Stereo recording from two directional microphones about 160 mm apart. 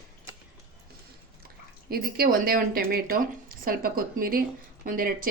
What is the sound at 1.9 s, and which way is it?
Speech, 65° right (ahead or behind).